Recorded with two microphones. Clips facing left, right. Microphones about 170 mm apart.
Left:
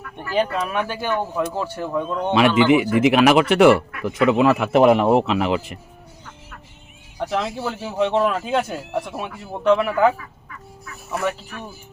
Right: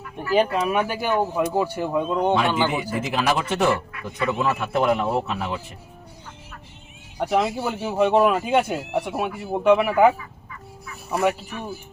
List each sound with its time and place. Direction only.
0.3 s speech: 10° right (ahead or behind)
2.6 s speech: 75° left (ahead or behind)
7.2 s speech: 10° right (ahead or behind)